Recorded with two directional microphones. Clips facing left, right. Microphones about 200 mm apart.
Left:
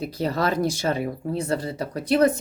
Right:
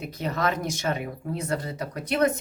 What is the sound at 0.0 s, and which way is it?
Speech, 35° left (ahead or behind).